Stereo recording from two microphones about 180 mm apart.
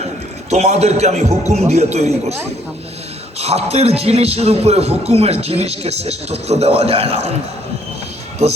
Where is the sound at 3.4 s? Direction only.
35° right (ahead or behind).